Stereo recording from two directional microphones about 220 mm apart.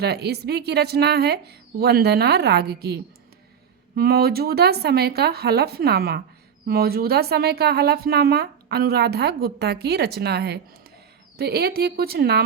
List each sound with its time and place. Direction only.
0.0 s speech: 45° right (ahead or behind)